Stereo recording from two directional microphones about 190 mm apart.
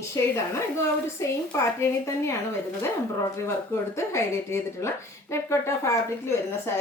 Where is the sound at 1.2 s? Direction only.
15° left (ahead or behind).